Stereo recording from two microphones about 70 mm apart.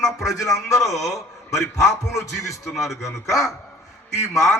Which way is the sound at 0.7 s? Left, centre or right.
Left.